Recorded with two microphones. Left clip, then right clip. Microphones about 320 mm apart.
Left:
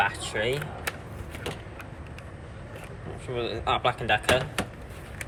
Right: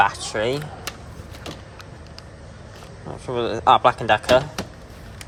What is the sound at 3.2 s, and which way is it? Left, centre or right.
Speech, centre.